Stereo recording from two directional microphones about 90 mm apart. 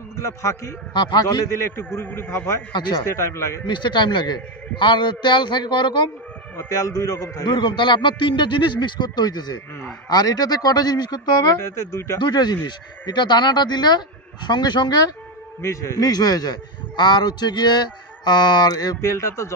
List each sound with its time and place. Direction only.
0.1 s a man's voice: 35° left (ahead or behind)
0.9 s a man's voice: 55° left (ahead or behind)
1.5 s a man's voice: 30° left (ahead or behind)
3.6 s a man's voice: 60° left (ahead or behind)
6.5 s speech: 35° left (ahead or behind)
7.4 s a man's voice: 60° left (ahead or behind)
11.6 s speech: 30° left (ahead or behind)
12.2 s a man's voice: 50° left (ahead or behind)
15.6 s a man's voice: 35° left (ahead or behind)
18.9 s speech: 30° left (ahead or behind)